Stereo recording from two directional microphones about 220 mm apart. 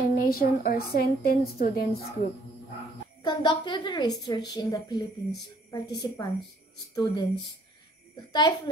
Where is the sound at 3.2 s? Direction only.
20° left (ahead or behind).